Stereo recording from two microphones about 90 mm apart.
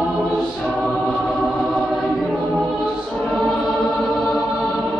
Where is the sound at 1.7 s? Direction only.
10° right (ahead or behind).